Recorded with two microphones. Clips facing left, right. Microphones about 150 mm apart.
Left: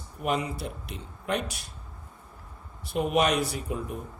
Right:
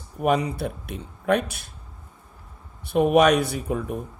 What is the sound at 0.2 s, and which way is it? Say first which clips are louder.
Speech: right 7 dB; 60° right (ahead or behind).